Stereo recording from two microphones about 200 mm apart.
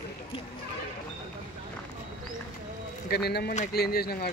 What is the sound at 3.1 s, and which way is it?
Speech, 55° left (ahead or behind).